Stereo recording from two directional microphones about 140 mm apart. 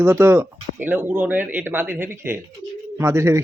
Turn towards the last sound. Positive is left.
turn(degrees=-20)  # may be behind; listen again after turning